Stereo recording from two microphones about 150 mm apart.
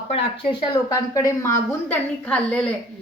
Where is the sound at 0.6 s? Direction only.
25° left (ahead or behind).